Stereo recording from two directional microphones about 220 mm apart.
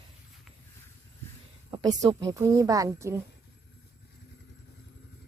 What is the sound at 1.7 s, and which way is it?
Speech, 20° right (ahead or behind).